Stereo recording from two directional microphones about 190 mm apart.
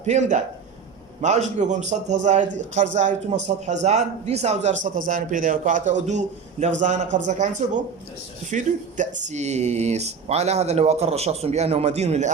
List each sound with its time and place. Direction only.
0.0 s a man's voice: 35° right (ahead or behind)